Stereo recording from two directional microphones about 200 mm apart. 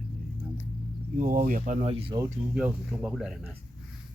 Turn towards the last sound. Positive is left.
turn(degrees=0)  # may be behind; listen again after turning